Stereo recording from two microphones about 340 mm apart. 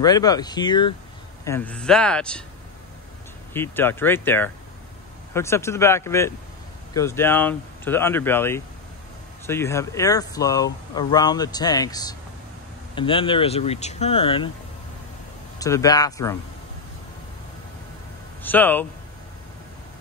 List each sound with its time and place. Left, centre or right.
0.0 s speech: centre
3.5 s speech: centre
15.6 s speech: centre
18.4 s speech: centre